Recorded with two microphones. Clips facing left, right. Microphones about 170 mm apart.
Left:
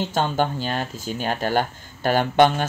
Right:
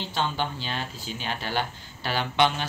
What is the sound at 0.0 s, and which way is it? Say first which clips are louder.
Speech: left 7 dB; 45° left (ahead or behind).